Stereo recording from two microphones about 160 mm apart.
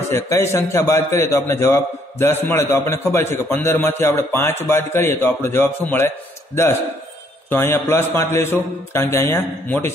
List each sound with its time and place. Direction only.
0.1 s a man's voice: 15° left (ahead or behind)